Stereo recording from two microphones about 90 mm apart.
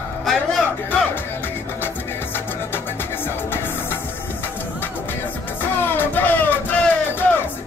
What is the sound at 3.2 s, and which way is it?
Music, 25° left (ahead or behind).